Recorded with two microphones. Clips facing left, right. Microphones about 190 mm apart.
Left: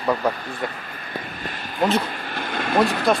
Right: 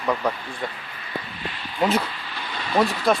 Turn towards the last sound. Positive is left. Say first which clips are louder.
# left 2 dB
turn(degrees=55)  # may be behind; listen again after turning